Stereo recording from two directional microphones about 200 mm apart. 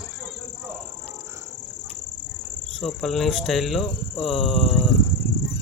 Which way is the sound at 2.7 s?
Centre (ahead or behind).